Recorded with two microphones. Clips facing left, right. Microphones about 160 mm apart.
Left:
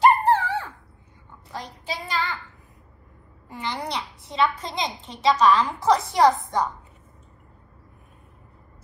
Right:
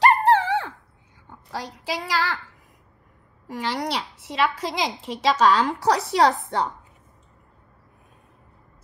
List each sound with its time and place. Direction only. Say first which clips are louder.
0.0 s dog: right 1 dB; 75° right (ahead or behind)
1.5 s child singing: right 3 dB; 90° right
3.4 s a woman's voice: right 4 dB; 85° right